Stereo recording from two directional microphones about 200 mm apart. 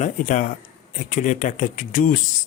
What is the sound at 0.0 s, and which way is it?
Speech, 40° left (ahead or behind).